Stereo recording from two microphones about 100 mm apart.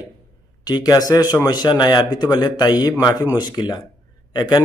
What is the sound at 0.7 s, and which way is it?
A man's voice, 40° left (ahead or behind).